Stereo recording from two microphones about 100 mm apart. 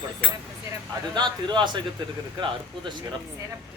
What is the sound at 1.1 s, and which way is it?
Speech, 50° right (ahead or behind).